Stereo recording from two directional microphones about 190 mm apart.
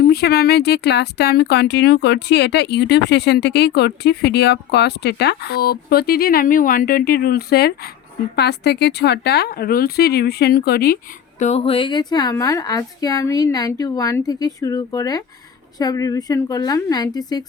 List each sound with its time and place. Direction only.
0.0 s speech: 55° left (ahead or behind)
11.3 s a woman's voice: 35° left (ahead or behind); by 17.4 s 20° left (ahead or behind)